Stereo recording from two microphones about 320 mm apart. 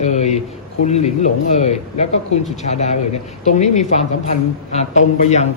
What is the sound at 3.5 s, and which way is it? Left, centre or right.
A woman's voice, left.